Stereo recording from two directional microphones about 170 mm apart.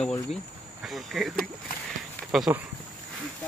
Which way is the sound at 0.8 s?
Centre (ahead or behind).